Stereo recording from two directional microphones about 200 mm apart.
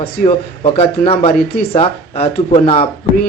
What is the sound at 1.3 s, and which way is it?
Speech, 50° left (ahead or behind).